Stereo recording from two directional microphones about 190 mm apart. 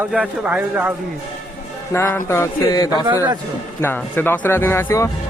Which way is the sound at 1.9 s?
15° left (ahead or behind).